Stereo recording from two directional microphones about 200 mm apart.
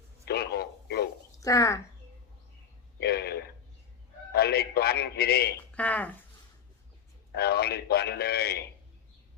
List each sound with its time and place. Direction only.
0.3 s a sound: 55° left (ahead or behind)
1.4 s speech: 15° left (ahead or behind)
3.0 s a sound: 55° left (ahead or behind)
4.4 s a man's voice: 55° left (ahead or behind)
5.7 s speech: 5° left (ahead or behind)
7.3 s a man's voice: 55° left (ahead or behind)